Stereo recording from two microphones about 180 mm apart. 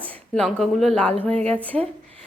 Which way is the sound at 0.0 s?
5° left (ahead or behind).